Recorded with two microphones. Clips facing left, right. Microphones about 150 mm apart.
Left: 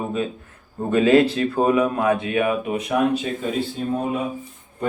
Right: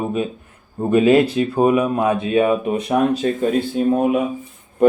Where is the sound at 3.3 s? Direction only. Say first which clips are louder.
Right 7 dB; 55° right (ahead or behind).